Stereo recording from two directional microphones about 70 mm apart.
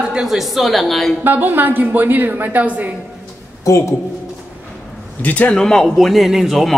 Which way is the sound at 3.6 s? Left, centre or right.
Left.